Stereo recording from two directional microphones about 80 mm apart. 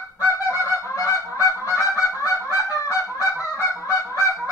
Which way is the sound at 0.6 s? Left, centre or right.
Right.